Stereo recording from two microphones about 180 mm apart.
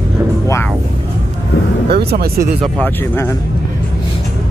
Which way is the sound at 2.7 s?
10° left (ahead or behind).